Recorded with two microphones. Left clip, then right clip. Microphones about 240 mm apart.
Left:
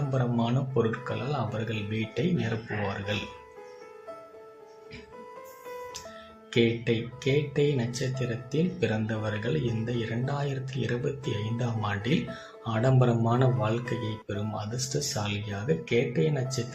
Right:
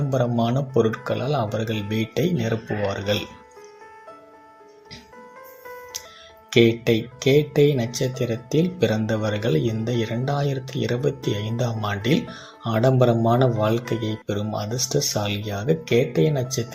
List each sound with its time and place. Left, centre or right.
0.1 s speech: right
6.5 s speech: right